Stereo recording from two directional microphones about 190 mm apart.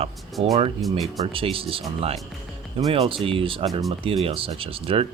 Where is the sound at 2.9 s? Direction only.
30° right (ahead or behind).